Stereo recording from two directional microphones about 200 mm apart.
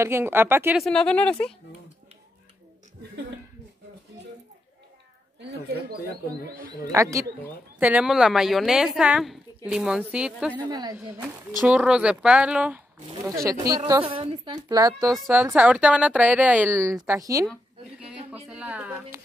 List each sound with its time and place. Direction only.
0.0 s speech: 10° right (ahead or behind)
0.8 s speech: 5° left (ahead or behind)
6.9 s speech: 15° right (ahead or behind)
10.7 s speech: 20° right (ahead or behind)
11.0 s speech: 5° right (ahead or behind)
14.0 s speech: 25° right (ahead or behind)
18.0 s a sound: 5° right (ahead or behind)
18.5 s speech: 5° right (ahead or behind)